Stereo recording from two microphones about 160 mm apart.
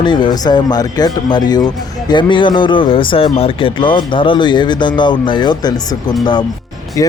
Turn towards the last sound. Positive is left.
turn(degrees=20)  # may be behind; listen again after turning